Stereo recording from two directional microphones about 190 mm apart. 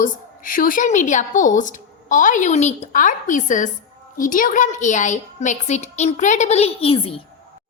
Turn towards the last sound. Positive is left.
turn(degrees=30)  # may be behind; listen again after turning